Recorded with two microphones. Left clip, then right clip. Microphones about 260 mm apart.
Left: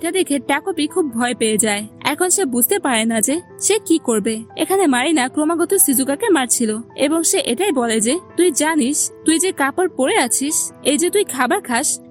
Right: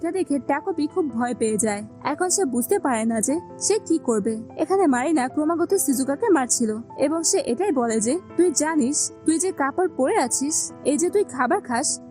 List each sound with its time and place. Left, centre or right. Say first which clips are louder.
0.0 s a woman's voice: left 5 dB; centre
6.2 s a woman's voice: left 3 dB; centre